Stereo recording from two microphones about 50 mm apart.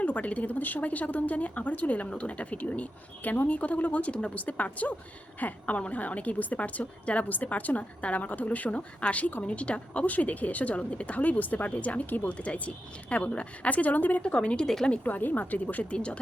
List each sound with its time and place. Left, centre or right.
0.0 s a woman's voice: left
14.2 s a woman's voice: left
15.0 s speech: left